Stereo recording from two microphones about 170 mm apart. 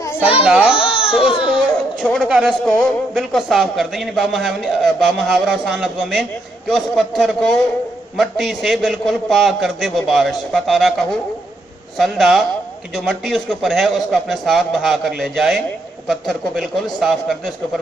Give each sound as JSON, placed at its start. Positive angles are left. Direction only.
{"t": 0.4, "sound": "a man's voice", "side_deg": -5}
{"t": 0.8, "sound": "baby cry", "side_deg": 35}
{"t": 1.2, "sound": "speech", "side_deg": 30}
{"t": 2.1, "sound": "a man's voice", "side_deg": 0}